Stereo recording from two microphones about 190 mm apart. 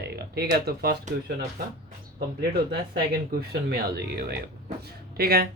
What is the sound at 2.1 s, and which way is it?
Speech, 55° right (ahead or behind).